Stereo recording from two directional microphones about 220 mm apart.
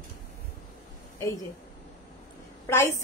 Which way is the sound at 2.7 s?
10° left (ahead or behind).